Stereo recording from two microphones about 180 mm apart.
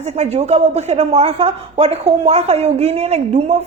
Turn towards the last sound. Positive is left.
turn(degrees=-35)  # may be behind; listen again after turning